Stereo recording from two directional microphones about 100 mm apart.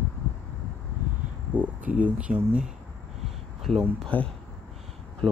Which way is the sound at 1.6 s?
15° right (ahead or behind).